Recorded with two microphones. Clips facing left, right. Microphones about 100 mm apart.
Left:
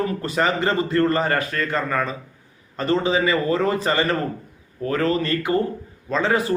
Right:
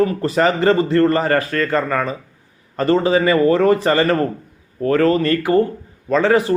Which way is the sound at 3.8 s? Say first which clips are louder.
Right 5 dB; 35° right (ahead or behind).